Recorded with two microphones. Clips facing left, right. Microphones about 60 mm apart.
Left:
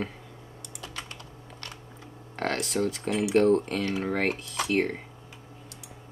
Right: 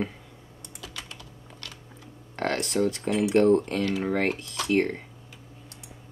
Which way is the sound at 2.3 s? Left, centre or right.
Centre.